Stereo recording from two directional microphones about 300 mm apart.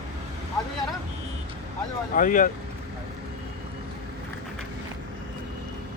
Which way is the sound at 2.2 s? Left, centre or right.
Left.